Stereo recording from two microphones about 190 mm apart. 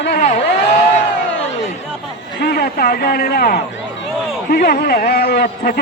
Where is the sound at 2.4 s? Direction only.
55° left (ahead or behind).